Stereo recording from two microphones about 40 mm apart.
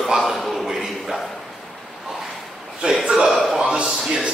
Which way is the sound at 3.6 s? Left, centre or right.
Centre.